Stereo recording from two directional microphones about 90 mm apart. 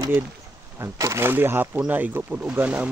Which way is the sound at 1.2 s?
25° right (ahead or behind).